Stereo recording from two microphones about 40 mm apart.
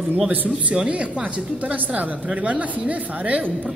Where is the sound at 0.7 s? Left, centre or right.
Right.